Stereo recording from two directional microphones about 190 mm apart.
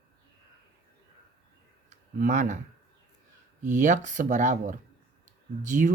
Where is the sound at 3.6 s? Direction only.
40° right (ahead or behind).